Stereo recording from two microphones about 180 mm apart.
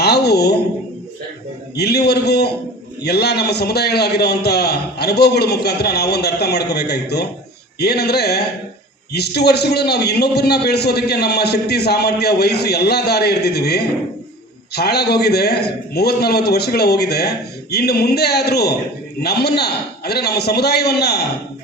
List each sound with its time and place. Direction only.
0.0 s a man's voice: 65° left (ahead or behind)
1.7 s a man's voice: 65° left (ahead or behind)